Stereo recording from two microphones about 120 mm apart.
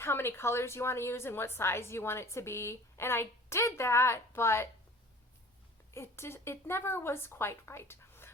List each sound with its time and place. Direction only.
0.0 s a woman's voice: 20° left (ahead or behind)
5.9 s a woman's voice: 20° left (ahead or behind)